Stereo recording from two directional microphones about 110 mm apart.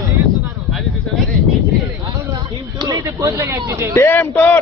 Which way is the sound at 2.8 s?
30° right (ahead or behind).